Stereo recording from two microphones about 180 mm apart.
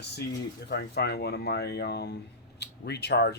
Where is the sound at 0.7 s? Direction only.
65° left (ahead or behind).